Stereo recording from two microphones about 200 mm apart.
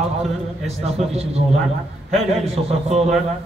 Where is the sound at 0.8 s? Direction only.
30° right (ahead or behind).